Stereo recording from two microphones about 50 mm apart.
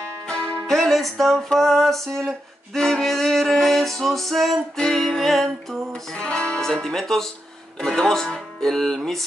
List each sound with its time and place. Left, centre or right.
0.0 s music: centre
0.7 s music: centre
4.7 s speech: centre
6.1 s music: centre
6.6 s speech: centre